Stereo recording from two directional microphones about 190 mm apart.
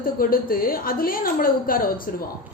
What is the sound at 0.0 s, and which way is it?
A woman's voice, 50° left (ahead or behind).